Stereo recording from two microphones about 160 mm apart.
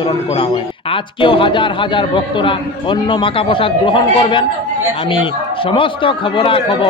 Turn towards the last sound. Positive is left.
turn(degrees=35)  # may be behind; listen again after turning